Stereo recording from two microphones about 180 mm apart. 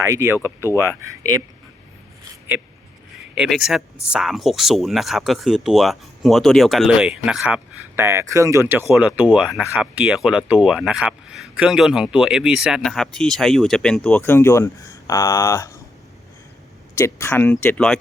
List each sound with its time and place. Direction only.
0.0 s speech: 15° right (ahead or behind)
3.3 s speech: 5° right (ahead or behind); by 15.8 s 15° left (ahead or behind)
17.0 s speech: 15° left (ahead or behind)